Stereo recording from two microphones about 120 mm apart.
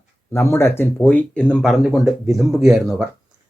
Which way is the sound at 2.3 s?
Centre (ahead or behind).